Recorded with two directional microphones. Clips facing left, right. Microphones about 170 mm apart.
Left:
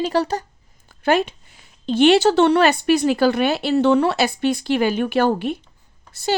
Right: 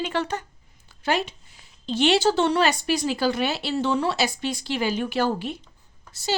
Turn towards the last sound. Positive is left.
turn(degrees=55)  # may be behind; listen again after turning